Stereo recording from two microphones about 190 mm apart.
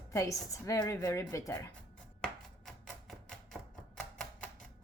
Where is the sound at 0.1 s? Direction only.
15° left (ahead or behind).